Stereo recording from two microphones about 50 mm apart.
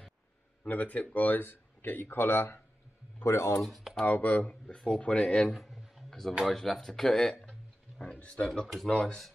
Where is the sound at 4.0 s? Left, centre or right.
Left.